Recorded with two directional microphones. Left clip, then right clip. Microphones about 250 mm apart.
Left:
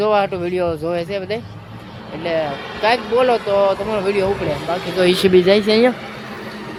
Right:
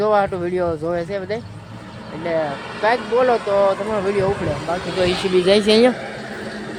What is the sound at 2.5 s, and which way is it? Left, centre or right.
Speech, left.